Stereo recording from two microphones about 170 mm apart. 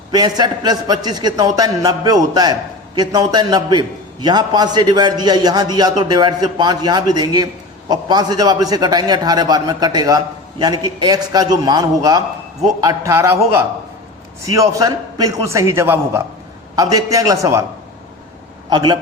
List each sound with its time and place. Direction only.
0.1 s a man's voice: 25° right (ahead or behind)
14.4 s a man's voice: 20° right (ahead or behind)
18.7 s a man's voice: 25° right (ahead or behind)